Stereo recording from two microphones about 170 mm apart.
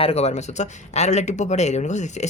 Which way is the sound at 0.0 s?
40° left (ahead or behind).